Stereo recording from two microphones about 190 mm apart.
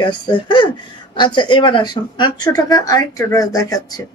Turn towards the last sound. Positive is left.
turn(degrees=20)  # may be behind; listen again after turning